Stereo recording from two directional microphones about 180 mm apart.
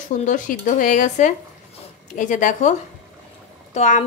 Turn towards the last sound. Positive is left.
turn(degrees=40)  # may be behind; listen again after turning